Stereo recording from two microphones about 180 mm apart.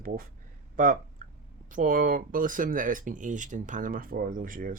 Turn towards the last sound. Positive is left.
turn(degrees=-50)  # may be behind; listen again after turning